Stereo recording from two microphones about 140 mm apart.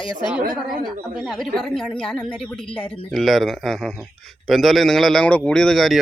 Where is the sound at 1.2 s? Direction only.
Centre (ahead or behind).